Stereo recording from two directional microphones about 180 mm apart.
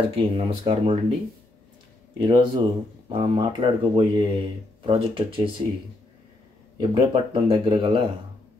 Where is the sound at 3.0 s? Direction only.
25° right (ahead or behind).